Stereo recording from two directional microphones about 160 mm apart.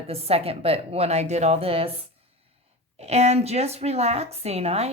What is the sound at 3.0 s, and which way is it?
A woman's voice, 45° right (ahead or behind).